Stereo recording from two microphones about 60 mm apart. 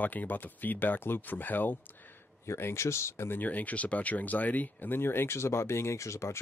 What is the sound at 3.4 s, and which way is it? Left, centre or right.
Speech, left.